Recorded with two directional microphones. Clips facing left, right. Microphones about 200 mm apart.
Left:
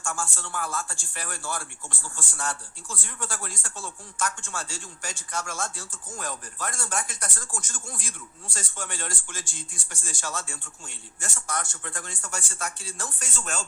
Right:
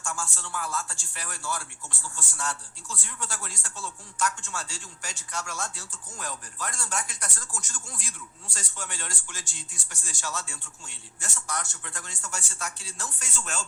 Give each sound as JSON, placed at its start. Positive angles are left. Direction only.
{"t": 0.0, "sound": "speech", "side_deg": 55}